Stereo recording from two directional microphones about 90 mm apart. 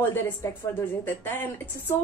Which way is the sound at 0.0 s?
30° left (ahead or behind).